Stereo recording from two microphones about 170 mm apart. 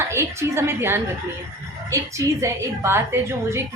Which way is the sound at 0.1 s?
15° right (ahead or behind).